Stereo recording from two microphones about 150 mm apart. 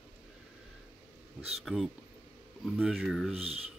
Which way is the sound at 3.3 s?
40° right (ahead or behind).